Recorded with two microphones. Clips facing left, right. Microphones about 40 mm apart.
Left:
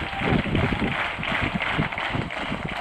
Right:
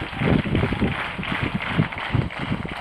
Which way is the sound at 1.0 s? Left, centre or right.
Left.